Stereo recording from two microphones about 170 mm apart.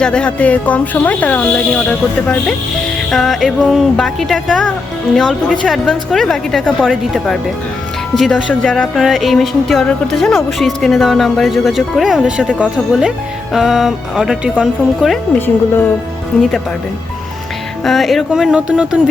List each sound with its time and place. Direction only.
0.0 s speech: 5° left (ahead or behind)
8.6 s speech: 5° left (ahead or behind)
15.4 s speech: 10° left (ahead or behind)
17.8 s speech: centre (ahead or behind)